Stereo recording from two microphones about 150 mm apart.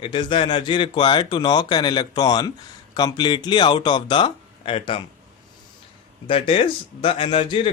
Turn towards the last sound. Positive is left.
turn(degrees=40)  # may be behind; listen again after turning